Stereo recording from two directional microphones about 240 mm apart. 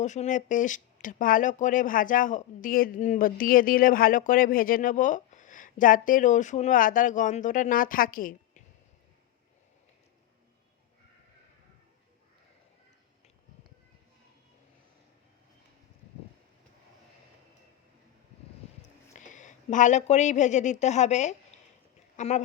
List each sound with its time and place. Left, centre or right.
0.0 s speech: left
19.1 s a woman's voice: left